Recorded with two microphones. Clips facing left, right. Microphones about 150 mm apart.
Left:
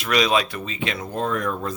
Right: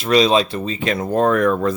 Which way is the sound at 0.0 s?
30° right (ahead or behind).